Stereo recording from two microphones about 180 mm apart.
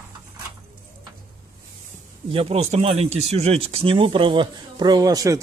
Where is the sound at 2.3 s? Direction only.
35° right (ahead or behind).